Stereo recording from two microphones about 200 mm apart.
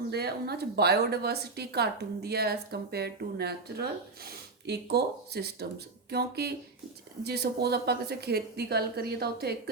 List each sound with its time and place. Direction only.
0.1 s a woman's voice: 55° right (ahead or behind)